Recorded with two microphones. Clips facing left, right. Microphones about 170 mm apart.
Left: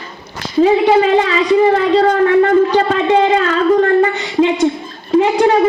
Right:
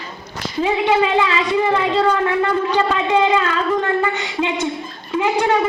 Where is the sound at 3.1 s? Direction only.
40° left (ahead or behind).